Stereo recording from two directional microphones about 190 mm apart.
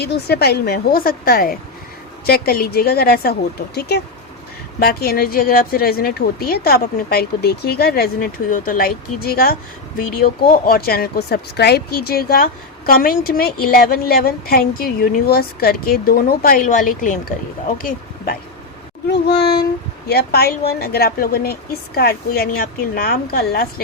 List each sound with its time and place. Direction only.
0.0 s a woman's voice: 60° left (ahead or behind)
19.1 s a woman's voice: 60° left (ahead or behind)